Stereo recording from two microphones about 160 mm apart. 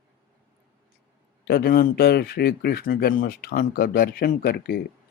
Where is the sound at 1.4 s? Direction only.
75° left (ahead or behind).